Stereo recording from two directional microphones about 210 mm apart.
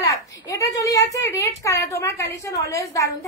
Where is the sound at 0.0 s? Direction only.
15° left (ahead or behind).